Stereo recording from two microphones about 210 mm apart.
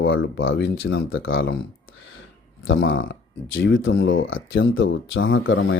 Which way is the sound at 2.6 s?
65° left (ahead or behind).